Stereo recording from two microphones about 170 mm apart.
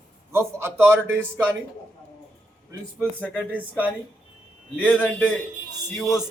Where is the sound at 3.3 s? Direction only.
10° right (ahead or behind).